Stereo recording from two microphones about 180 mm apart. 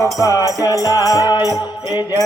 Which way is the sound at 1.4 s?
15° right (ahead or behind).